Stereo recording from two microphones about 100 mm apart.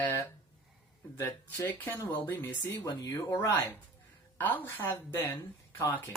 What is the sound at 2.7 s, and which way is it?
Speech, 35° left (ahead or behind).